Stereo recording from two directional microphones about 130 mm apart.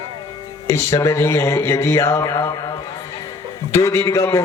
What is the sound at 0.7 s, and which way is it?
A man's voice, 20° left (ahead or behind).